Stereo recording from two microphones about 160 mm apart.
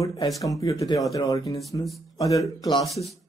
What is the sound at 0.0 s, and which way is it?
A man's voice, 20° left (ahead or behind).